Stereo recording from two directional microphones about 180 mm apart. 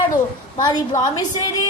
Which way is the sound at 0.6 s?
20° left (ahead or behind).